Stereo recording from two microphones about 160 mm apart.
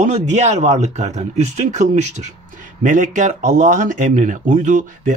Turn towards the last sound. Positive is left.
turn(degrees=-50)  # may be behind; listen again after turning